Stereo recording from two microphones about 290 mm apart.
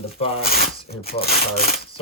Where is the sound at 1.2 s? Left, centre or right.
Left.